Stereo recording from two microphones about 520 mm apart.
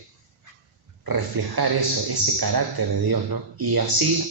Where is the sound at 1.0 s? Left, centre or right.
Right.